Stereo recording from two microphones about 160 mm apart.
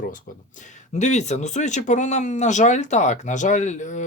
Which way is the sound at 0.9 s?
45° left (ahead or behind).